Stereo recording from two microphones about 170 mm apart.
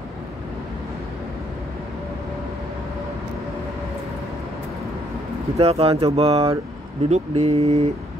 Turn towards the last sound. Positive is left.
turn(degrees=-35)  # may be behind; listen again after turning